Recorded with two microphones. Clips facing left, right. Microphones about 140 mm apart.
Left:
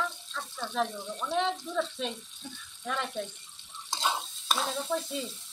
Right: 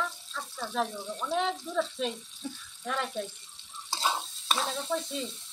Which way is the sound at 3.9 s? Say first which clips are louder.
Even; centre (ahead or behind).